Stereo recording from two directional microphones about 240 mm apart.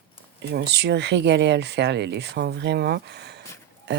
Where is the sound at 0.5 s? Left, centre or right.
Right.